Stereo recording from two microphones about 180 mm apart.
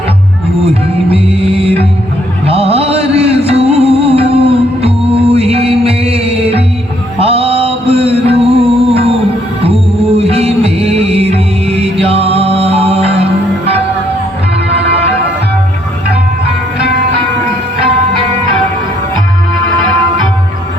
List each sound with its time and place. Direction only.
0.6 s music: 35° right (ahead or behind)
10.2 s music: 35° right (ahead or behind)